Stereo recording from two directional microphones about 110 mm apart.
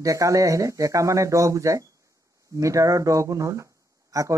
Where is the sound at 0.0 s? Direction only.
30° right (ahead or behind).